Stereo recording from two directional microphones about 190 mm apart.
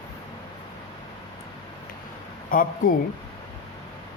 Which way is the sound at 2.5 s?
45° left (ahead or behind).